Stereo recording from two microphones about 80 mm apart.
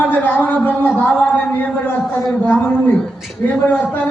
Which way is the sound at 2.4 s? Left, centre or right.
Left.